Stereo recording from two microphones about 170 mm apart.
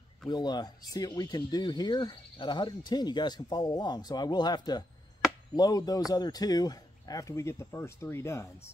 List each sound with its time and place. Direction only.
0.3 s speech: 25° left (ahead or behind)